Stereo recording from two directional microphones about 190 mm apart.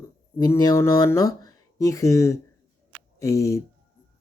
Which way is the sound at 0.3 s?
20° left (ahead or behind).